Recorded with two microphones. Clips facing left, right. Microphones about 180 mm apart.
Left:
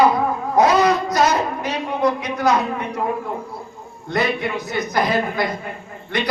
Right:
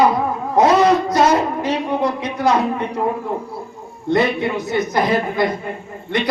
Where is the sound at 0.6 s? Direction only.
25° right (ahead or behind).